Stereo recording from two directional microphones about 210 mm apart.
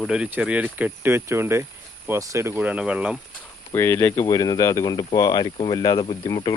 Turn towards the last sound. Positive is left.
turn(degrees=20)  # may be behind; listen again after turning